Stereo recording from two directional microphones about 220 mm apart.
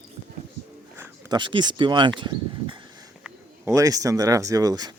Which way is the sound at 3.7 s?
15° right (ahead or behind).